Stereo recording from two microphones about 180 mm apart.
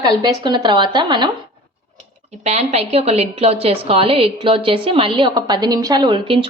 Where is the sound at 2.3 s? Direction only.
35° right (ahead or behind).